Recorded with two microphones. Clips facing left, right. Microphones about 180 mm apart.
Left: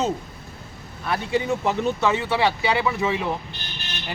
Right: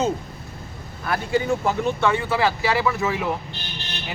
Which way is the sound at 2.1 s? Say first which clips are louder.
Even; 25° left (ahead or behind).